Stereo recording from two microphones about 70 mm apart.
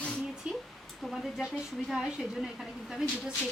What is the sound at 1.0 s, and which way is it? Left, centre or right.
A woman's voice, centre.